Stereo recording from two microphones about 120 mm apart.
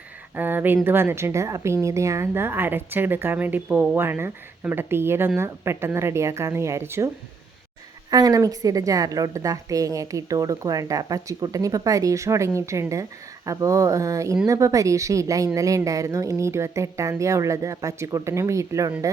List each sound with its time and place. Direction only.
0.3 s a woman's voice: 15° right (ahead or behind)
8.1 s a woman's voice: 30° right (ahead or behind)